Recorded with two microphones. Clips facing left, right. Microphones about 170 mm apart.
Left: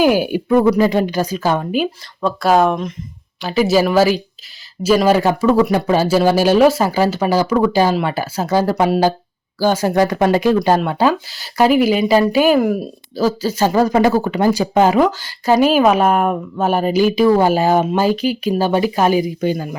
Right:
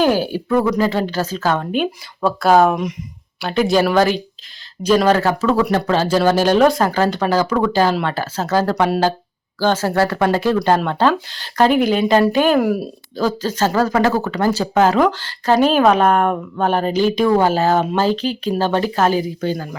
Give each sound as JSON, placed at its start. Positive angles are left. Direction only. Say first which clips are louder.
{"t": 0.0, "sound": "speech", "louder": "left 2 dB", "side_deg": 15}
{"t": 13.1, "sound": "speech", "louder": "left 2 dB", "side_deg": 10}